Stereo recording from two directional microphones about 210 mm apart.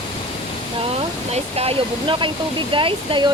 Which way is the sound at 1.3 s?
30° right (ahead or behind).